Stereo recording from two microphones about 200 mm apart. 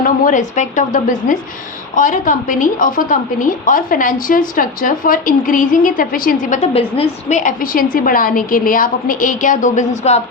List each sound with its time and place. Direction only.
0.0 s a woman's voice: 40° left (ahead or behind)